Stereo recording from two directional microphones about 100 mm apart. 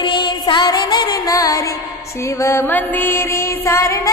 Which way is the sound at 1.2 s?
35° left (ahead or behind).